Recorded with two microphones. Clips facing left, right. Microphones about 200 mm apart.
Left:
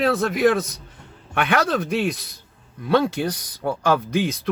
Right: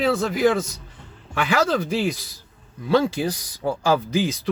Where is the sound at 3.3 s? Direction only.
60° left (ahead or behind).